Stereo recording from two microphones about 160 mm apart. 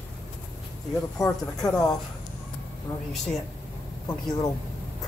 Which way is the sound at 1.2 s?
20° left (ahead or behind).